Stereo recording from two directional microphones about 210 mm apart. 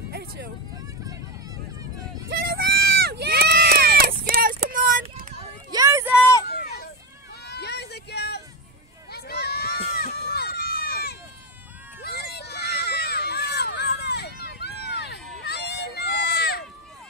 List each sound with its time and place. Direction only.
2.2 s run: 50° right (ahead or behind)
5.7 s a sound: 15° right (ahead or behind)
6.4 s a sound: 45° left (ahead or behind)
9.1 s run: 50° left (ahead or behind)
12.0 s crowd: 50° left (ahead or behind)
15.4 s run: 55° left (ahead or behind)